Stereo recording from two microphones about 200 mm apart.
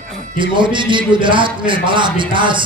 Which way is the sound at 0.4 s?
25° right (ahead or behind).